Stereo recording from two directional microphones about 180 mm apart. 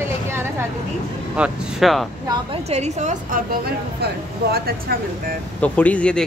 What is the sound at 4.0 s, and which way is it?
Speech, 60° right (ahead or behind).